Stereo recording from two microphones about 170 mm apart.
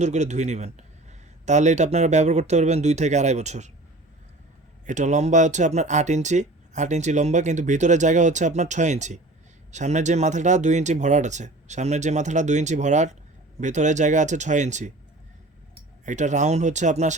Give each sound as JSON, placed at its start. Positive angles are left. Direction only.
{"t": 0.0, "sound": "speech", "side_deg": -40}
{"t": 4.9, "sound": "speech", "side_deg": -45}
{"t": 16.0, "sound": "speech", "side_deg": -45}